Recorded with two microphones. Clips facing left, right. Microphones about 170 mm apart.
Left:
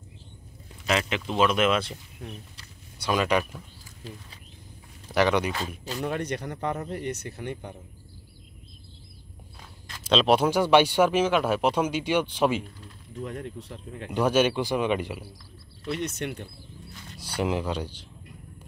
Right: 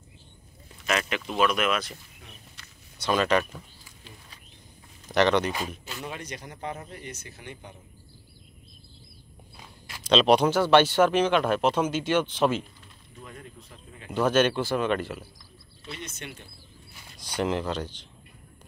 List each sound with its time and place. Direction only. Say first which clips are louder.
0.8 s speech: left 2 dB; 20° left (ahead or behind)
3.0 s speech: right 1 dB; 10° left (ahead or behind)
5.0 s speech: right 1 dB; 10° left (ahead or behind)
6.0 s speech: left 9 dB; 60° left (ahead or behind)
9.6 s a sound: right 1 dB; 10° right (ahead or behind)
10.0 s speech: right 1 dB; 5° left (ahead or behind)
13.2 s speech: left 10 dB; 80° left
14.1 s speech: even; 10° left (ahead or behind)
15.8 s speech: left 10 dB; 65° left (ahead or behind)
17.4 s speech: even; 10° left (ahead or behind)